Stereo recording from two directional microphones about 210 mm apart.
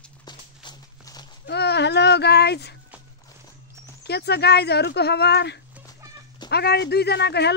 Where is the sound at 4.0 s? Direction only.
50° left (ahead or behind).